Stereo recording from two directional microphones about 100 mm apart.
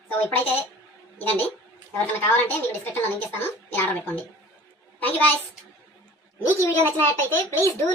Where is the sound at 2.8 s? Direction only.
20° left (ahead or behind).